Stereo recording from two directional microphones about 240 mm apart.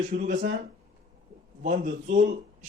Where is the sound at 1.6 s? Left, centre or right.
Right.